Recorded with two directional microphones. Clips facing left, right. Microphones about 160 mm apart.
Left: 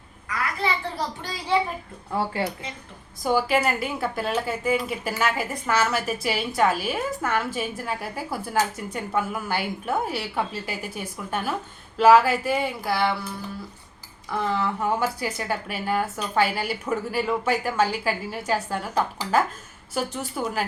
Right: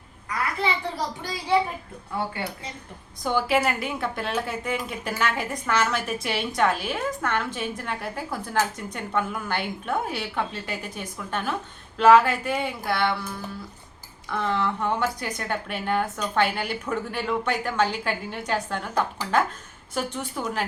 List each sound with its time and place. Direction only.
0.9 s a child's voice: 10° right (ahead or behind)
2.1 s speech: 35° left (ahead or behind)
3.2 s a woman's voice: centre (ahead or behind)
14.3 s a woman's voice: 5° left (ahead or behind)